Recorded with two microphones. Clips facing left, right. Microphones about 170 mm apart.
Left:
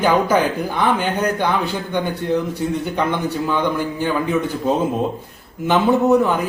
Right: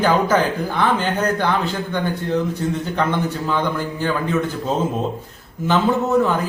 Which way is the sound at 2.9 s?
15° left (ahead or behind).